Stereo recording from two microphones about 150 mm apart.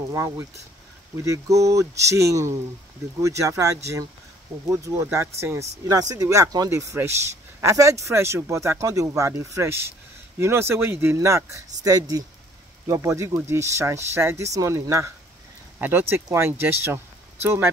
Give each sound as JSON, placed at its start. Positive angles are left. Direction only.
{"t": 0.1, "sound": "speech", "side_deg": -20}